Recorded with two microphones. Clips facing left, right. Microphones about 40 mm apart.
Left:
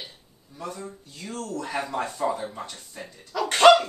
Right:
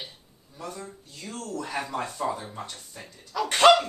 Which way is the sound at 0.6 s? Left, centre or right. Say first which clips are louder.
Left 2 dB; centre.